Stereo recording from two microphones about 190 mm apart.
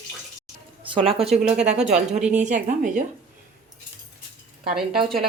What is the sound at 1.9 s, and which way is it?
Speech, 35° right (ahead or behind).